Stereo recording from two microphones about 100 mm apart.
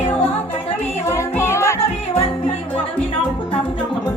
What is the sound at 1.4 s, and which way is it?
Music, 25° left (ahead or behind).